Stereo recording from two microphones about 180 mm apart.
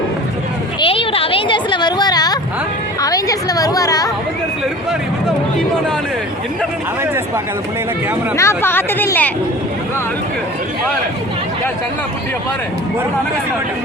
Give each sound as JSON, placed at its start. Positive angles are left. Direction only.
{"t": 0.8, "sound": "a sound", "side_deg": 30}
{"t": 3.0, "sound": "chatter", "side_deg": 20}
{"t": 8.4, "sound": "speech", "side_deg": 15}